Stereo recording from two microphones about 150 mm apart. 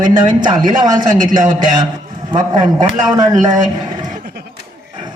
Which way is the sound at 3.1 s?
25° right (ahead or behind).